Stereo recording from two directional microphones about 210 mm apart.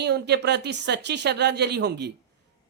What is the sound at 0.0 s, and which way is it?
Speech, 50° right (ahead or behind).